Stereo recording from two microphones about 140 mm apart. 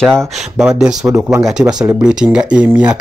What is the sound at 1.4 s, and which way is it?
Speech, 5° right (ahead or behind).